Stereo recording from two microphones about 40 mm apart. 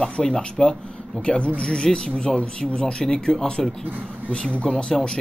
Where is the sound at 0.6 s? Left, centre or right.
Centre.